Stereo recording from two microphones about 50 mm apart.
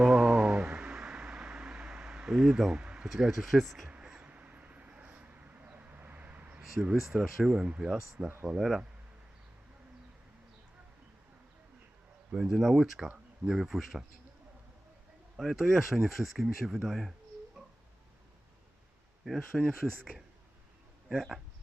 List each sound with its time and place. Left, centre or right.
0.0 s a sound: right
0.9 s a sound: centre
3.1 s speech: centre
4.2 s vehicle: right
6.6 s a sound: centre
6.9 s speech: centre
7.6 s speech: centre
7.9 s speech: centre
12.3 s speech: centre
15.4 s speech: centre
17.6 s a sound: centre
19.5 s speech: centre
21.1 s speech: centre